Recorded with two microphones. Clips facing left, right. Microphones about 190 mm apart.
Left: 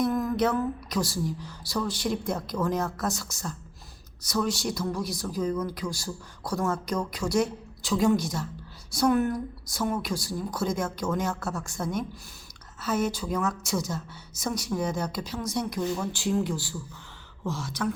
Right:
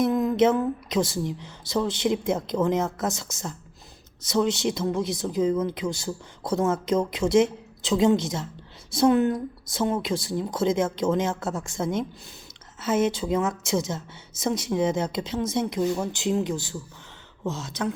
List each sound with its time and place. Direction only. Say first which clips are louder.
0.0 s speech: right 5 dB; 20° right (ahead or behind)